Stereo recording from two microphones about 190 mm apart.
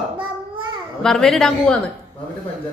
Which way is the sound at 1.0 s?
Centre (ahead or behind).